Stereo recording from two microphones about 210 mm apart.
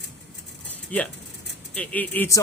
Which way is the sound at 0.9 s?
5° left (ahead or behind).